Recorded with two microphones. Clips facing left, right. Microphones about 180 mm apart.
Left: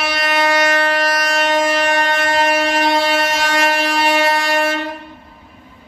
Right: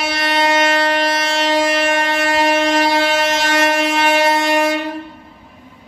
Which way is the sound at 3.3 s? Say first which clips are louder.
Right 1 dB; 25° right (ahead or behind).